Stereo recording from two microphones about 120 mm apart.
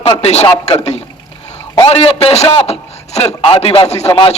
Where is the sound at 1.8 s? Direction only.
55° left (ahead or behind).